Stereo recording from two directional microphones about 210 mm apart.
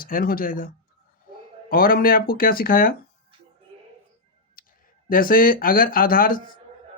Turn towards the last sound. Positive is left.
turn(degrees=40)  # may be behind; listen again after turning